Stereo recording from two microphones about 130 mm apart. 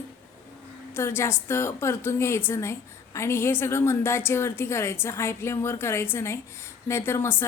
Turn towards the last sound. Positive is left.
turn(degrees=20)  # may be behind; listen again after turning